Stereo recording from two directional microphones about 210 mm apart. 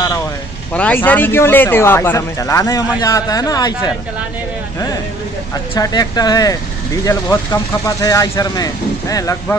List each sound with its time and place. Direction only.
0.7 s speech: 5° left (ahead or behind)
5.5 s speech: 15° left (ahead or behind)